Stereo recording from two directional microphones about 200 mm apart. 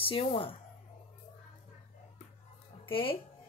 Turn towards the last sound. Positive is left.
turn(degrees=25)  # may be behind; listen again after turning